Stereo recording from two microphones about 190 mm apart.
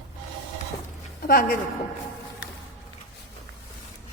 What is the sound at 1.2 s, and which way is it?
Speech, 50° left (ahead or behind).